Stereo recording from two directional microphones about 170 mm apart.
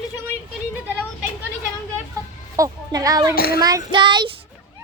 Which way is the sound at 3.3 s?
60° left (ahead or behind).